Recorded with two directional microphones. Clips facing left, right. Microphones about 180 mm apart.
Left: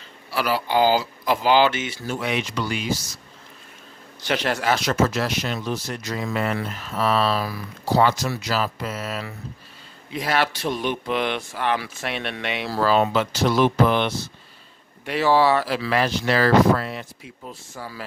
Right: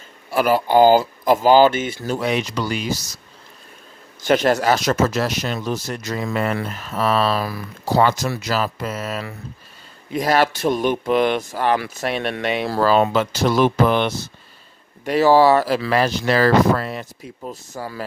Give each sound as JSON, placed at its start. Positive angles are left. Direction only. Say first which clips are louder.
{"t": 0.3, "sound": "speech", "louder": "right 6 dB", "side_deg": -50}
{"t": 4.2, "sound": "speech", "louder": "right 7 dB", "side_deg": -45}